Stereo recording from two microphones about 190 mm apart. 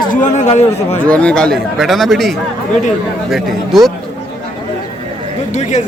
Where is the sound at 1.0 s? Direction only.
5° left (ahead or behind).